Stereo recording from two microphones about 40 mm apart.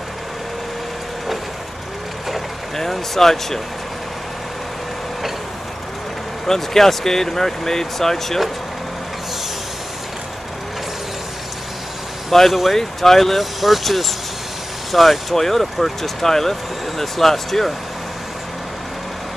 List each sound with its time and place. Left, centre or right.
2.7 s speech: centre
6.4 s speech: centre
12.3 s speech: centre